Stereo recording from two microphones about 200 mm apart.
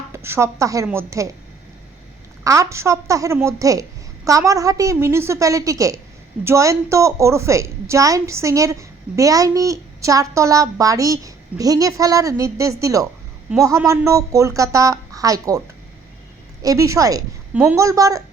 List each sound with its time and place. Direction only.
0.1 s a woman's voice: 15° right (ahead or behind)
2.4 s a woman's voice: 15° right (ahead or behind)
16.6 s a woman's voice: 15° right (ahead or behind)